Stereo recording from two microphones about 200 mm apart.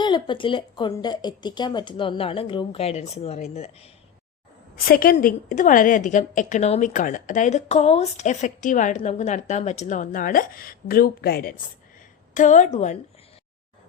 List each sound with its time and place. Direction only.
0.0 s speech: 25° left (ahead or behind)
4.9 s a woman's voice: 45° left (ahead or behind)
12.3 s a woman's voice: 40° left (ahead or behind)